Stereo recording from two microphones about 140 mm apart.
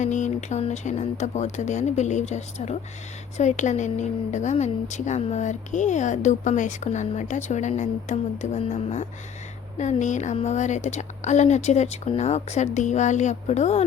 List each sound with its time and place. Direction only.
0.0 s a woman's voice: 60° left (ahead or behind)